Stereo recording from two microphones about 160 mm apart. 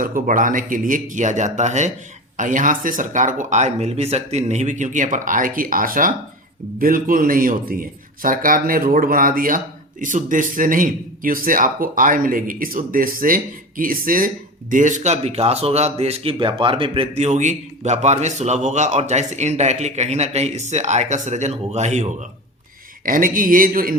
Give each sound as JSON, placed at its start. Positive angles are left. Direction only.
{"t": 0.0, "sound": "a man's voice", "side_deg": -60}
{"t": 23.0, "sound": "a man's voice", "side_deg": -60}